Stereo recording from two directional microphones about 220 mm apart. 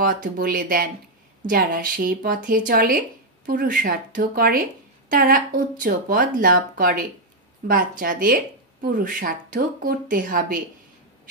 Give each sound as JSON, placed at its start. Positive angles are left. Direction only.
{"t": 0.0, "sound": "speech", "side_deg": -40}